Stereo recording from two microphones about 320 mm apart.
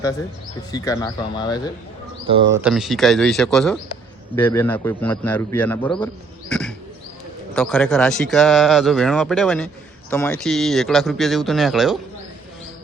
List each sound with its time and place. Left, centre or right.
0.7 s speech: centre
2.2 s speech: centre
2.6 s speech: centre
6.5 s a sound: centre
7.5 s speech: centre